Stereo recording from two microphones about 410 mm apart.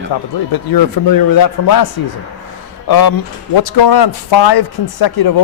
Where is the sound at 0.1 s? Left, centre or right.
Left.